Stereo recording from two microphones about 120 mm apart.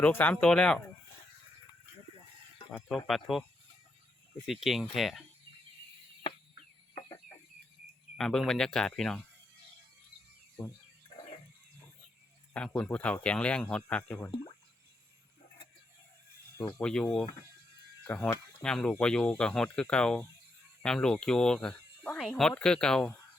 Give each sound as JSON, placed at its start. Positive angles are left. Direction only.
{"t": 0.0, "sound": "speech", "side_deg": 15}
{"t": 3.1, "sound": "speech", "side_deg": 0}
{"t": 4.4, "sound": "speech", "side_deg": 0}
{"t": 8.1, "sound": "speech", "side_deg": 0}
{"t": 12.5, "sound": "speech", "side_deg": 10}
{"t": 16.6, "sound": "speech", "side_deg": 20}
{"t": 16.8, "sound": "speech", "side_deg": 5}